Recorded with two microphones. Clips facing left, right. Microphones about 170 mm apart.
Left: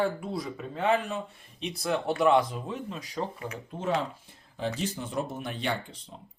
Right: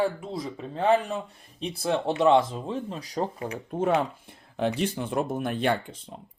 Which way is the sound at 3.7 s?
55° right (ahead or behind).